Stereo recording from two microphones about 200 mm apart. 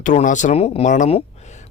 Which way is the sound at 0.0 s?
40° left (ahead or behind).